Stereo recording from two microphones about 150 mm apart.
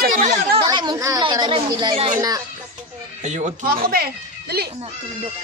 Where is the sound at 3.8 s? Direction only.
90° right.